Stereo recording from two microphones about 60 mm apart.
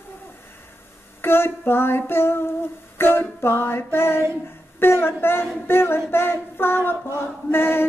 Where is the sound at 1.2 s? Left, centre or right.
Left.